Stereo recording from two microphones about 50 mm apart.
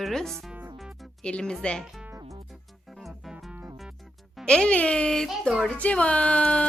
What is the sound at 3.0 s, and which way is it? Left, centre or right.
Music, centre.